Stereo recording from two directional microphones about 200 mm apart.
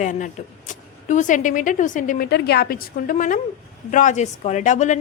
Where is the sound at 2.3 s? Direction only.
55° left (ahead or behind).